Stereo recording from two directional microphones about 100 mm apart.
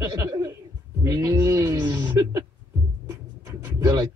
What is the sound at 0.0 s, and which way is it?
Chuckle, 30° right (ahead or behind).